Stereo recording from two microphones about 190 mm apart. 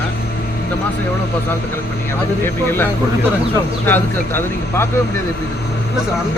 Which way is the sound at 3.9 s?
10° left (ahead or behind).